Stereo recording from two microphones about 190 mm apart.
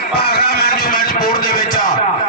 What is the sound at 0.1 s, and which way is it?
Music, 55° left (ahead or behind).